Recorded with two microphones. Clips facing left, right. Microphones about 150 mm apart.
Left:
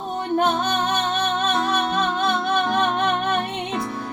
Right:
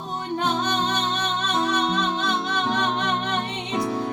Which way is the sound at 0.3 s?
55° left (ahead or behind).